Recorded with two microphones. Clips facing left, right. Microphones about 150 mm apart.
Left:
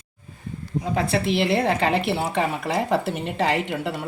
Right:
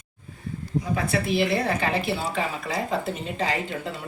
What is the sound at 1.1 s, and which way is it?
Speech, 25° left (ahead or behind).